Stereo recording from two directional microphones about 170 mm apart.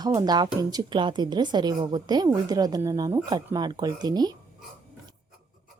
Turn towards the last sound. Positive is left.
turn(degrees=-25)  # may be behind; listen again after turning